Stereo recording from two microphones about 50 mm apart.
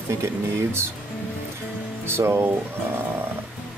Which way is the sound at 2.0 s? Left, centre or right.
Right.